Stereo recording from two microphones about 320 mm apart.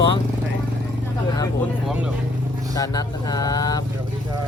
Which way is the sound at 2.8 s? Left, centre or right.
Centre.